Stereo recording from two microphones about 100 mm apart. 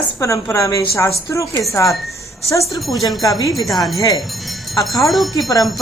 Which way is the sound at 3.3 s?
35° left (ahead or behind).